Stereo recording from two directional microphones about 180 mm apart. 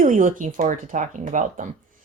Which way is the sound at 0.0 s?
45° right (ahead or behind).